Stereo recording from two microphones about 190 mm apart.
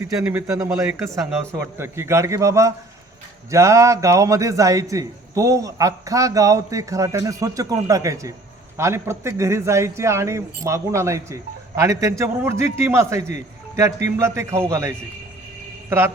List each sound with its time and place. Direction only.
0.0 s a man's voice: 15° right (ahead or behind)